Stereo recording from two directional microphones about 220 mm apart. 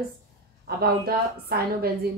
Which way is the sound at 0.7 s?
45° right (ahead or behind).